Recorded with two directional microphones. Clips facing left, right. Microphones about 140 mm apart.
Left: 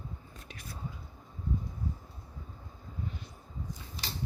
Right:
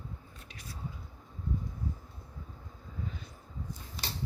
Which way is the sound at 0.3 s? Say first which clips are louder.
Left 2 dB; 50° left (ahead or behind).